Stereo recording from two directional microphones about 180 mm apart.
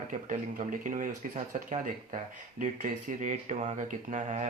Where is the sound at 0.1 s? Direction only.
45° right (ahead or behind).